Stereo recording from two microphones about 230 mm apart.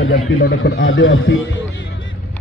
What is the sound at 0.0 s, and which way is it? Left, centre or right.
Speech, left.